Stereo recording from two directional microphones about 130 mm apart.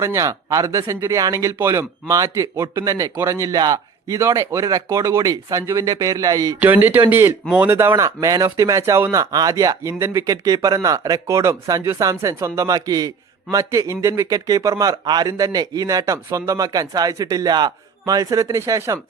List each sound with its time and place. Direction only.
0.0 s speech: 25° right (ahead or behind)
6.6 s speech: 15° right (ahead or behind)